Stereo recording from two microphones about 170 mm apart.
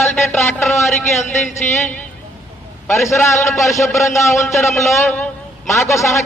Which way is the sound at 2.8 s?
15° left (ahead or behind).